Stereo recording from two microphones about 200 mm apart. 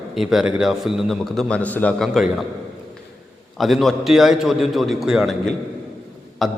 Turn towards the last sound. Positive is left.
turn(degrees=0)  # may be behind; listen again after turning